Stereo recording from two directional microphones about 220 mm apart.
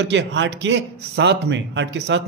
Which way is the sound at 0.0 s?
55° right (ahead or behind).